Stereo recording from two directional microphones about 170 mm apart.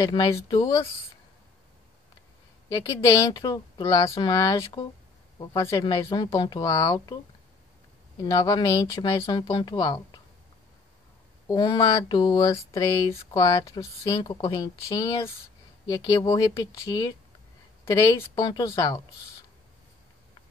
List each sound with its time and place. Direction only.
0.0 s speech: 25° left (ahead or behind)
2.7 s speech: 20° left (ahead or behind)
8.2 s speech: 25° left (ahead or behind)
11.4 s speech: 20° left (ahead or behind)